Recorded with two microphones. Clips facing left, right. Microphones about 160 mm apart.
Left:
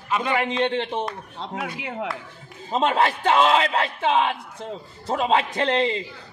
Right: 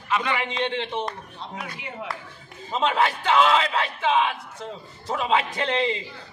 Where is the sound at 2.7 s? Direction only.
40° left (ahead or behind).